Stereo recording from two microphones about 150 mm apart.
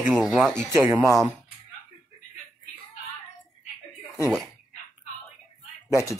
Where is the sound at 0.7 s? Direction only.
15° right (ahead or behind).